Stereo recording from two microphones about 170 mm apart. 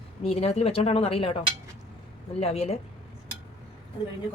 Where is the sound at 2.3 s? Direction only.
35° left (ahead or behind).